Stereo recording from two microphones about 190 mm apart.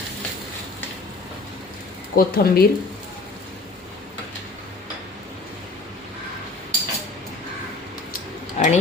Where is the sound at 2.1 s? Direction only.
55° left (ahead or behind).